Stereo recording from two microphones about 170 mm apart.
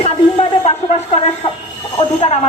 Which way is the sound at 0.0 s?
40° left (ahead or behind).